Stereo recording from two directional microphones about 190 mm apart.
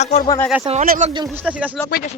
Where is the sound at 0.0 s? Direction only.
35° left (ahead or behind).